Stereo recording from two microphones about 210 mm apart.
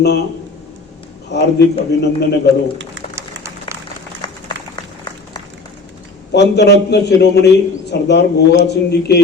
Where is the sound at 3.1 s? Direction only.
15° right (ahead or behind).